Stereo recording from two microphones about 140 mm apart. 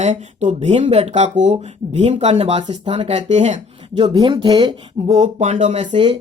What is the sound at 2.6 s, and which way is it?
Speech, 35° right (ahead or behind).